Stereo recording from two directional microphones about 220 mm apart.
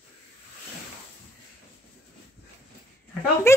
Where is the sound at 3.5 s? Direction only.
10° left (ahead or behind).